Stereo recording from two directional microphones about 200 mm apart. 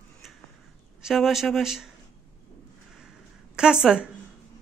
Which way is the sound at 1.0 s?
Centre (ahead or behind).